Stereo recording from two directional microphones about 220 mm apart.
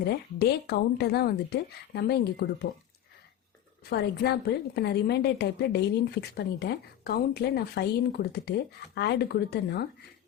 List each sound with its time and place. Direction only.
0.0 s a woman's voice: 45° left (ahead or behind)
3.8 s a woman's voice: 45° left (ahead or behind)